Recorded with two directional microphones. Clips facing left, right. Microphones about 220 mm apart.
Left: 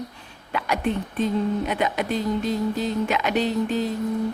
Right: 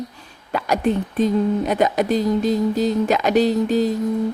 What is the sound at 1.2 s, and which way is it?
Speech, 40° right (ahead or behind).